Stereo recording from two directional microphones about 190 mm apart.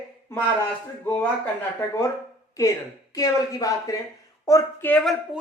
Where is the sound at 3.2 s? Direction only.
20° left (ahead or behind); by 5.4 s centre (ahead or behind).